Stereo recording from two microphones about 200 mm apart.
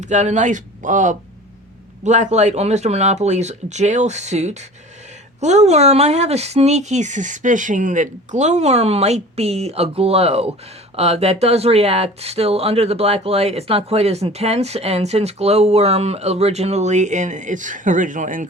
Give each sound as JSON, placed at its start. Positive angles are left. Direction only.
{"t": 0.0, "sound": "speech", "side_deg": -35}